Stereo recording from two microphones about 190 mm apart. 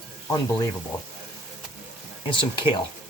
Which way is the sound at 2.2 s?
25° left (ahead or behind).